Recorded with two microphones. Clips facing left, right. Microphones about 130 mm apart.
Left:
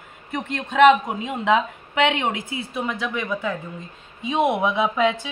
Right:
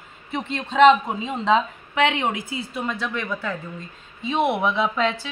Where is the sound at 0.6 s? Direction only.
5° left (ahead or behind).